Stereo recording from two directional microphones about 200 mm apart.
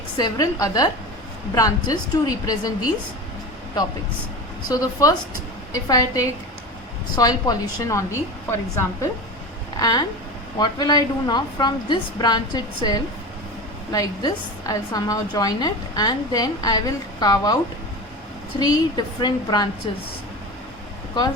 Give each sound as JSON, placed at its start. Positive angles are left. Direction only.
{"t": 0.2, "sound": "a woman's voice", "side_deg": 20}
{"t": 4.7, "sound": "a woman's voice", "side_deg": 15}
{"t": 18.6, "sound": "a woman's voice", "side_deg": 20}